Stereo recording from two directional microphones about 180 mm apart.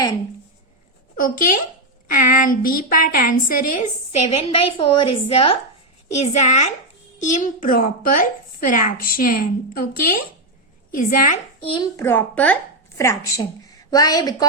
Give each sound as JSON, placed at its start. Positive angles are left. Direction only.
{"t": 1.1, "sound": "a woman's voice", "side_deg": 50}
{"t": 11.6, "sound": "a woman's voice", "side_deg": 30}
{"t": 11.9, "sound": "a woman's voice", "side_deg": 10}